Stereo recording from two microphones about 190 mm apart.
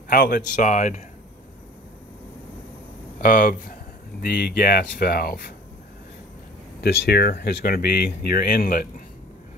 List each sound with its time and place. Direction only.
0.1 s speech: 50° left (ahead or behind)
3.2 s speech: 50° left (ahead or behind)
6.8 s speech: 55° left (ahead or behind)